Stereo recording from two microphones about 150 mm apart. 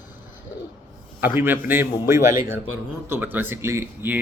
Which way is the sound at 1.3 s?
15° right (ahead or behind).